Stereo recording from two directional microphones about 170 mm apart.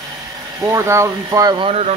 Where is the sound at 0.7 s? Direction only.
15° right (ahead or behind).